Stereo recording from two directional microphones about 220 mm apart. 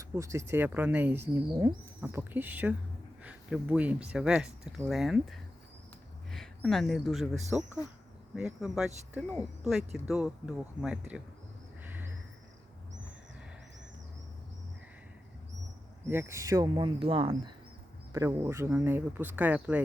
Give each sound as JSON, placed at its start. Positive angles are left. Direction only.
{"t": 0.0, "sound": "speech", "side_deg": -15}
{"t": 11.8, "sound": "vehicle", "side_deg": -10}
{"t": 16.0, "sound": "speech", "side_deg": -10}